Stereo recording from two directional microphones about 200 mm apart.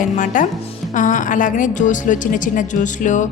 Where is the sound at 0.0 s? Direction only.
40° left (ahead or behind).